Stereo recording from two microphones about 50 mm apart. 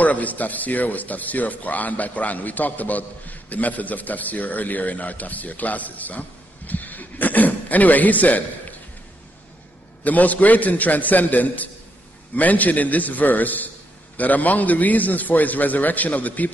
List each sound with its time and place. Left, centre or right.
0.0 s speech: left
10.0 s speech: left